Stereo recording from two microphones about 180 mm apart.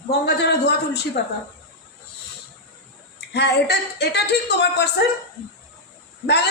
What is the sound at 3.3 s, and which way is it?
A woman's voice, 65° left (ahead or behind).